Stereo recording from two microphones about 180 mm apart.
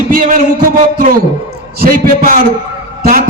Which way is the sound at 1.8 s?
50° right (ahead or behind).